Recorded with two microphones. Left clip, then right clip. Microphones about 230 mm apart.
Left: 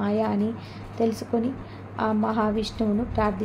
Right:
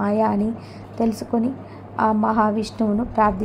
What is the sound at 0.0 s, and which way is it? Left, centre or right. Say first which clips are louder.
A woman's voice: right 5 dB; centre.